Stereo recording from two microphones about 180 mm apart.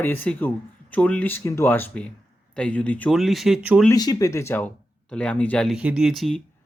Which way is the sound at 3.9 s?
20° left (ahead or behind).